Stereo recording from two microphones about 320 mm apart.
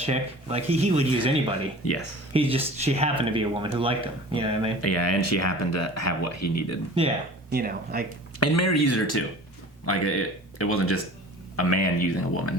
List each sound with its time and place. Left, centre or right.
0.0 s speech: centre
1.8 s speech: left
2.3 s speech: centre
4.8 s speech: left
7.5 s speech: right
8.4 s speech: left